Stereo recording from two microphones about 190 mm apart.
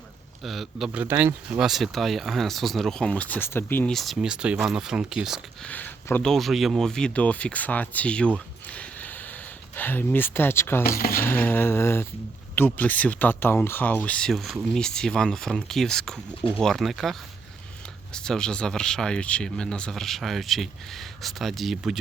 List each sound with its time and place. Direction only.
0.4 s speech: centre (ahead or behind)
5.7 s speech: 10° left (ahead or behind)
8.6 s a sound: 10° left (ahead or behind)
10.8 s speech: 50° left (ahead or behind)
11.2 s speech: 10° left (ahead or behind)